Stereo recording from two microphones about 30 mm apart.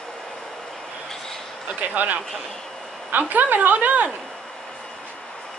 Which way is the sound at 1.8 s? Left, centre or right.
Right.